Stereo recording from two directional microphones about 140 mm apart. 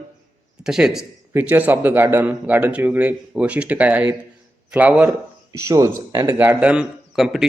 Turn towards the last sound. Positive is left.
turn(degrees=-5)  # may be behind; listen again after turning